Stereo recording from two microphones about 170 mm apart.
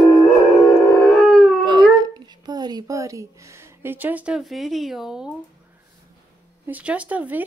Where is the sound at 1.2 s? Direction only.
Centre (ahead or behind).